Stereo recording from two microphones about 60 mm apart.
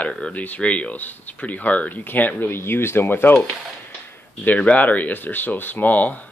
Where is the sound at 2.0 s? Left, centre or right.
Left.